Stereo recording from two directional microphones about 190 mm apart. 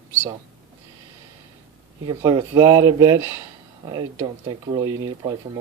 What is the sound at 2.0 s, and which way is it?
Speech, 20° right (ahead or behind).